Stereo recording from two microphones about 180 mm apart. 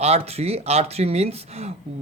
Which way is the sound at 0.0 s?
35° right (ahead or behind).